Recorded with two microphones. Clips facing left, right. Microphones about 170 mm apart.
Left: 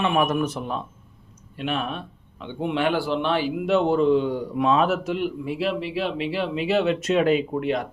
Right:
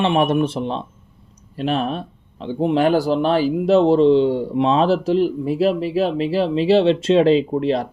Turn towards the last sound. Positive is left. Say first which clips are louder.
# right 6 dB
turn(degrees=-30)  # may be behind; listen again after turning